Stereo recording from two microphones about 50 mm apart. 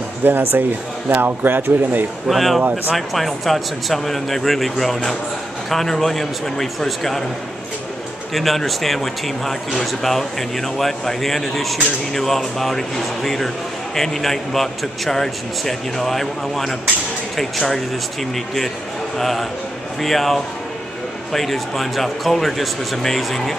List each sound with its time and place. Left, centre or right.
0.2 s speech: right
2.2 s a man's voice: centre
8.3 s a man's voice: centre